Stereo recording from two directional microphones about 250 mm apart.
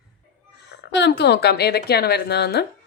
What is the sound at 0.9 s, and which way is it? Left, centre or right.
A woman's voice, left.